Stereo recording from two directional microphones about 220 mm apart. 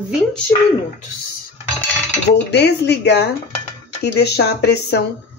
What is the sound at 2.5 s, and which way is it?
Speech, 50° left (ahead or behind).